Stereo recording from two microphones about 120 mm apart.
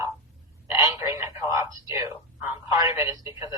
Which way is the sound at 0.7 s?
20° right (ahead or behind).